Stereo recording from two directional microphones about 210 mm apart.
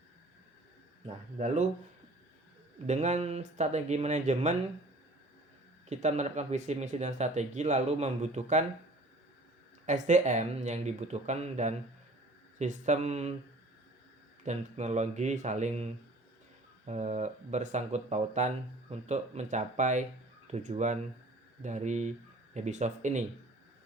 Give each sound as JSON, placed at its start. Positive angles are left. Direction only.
{"t": 1.0, "sound": "speech", "side_deg": -30}
{"t": 2.8, "sound": "speech", "side_deg": -35}
{"t": 5.9, "sound": "speech", "side_deg": -35}
{"t": 9.8, "sound": "speech", "side_deg": -35}
{"t": 14.4, "sound": "speech", "side_deg": -35}